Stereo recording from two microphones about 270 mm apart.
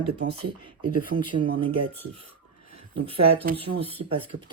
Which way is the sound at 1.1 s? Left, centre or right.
Right.